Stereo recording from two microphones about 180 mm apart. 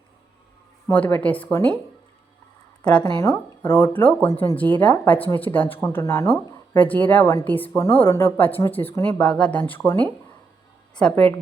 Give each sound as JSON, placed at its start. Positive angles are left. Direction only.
{"t": 0.9, "sound": "speech", "side_deg": 10}
{"t": 3.0, "sound": "speech", "side_deg": 15}